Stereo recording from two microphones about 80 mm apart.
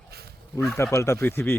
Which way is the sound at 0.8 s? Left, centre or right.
Left.